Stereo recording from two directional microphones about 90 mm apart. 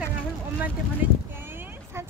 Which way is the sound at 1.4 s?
25° right (ahead or behind).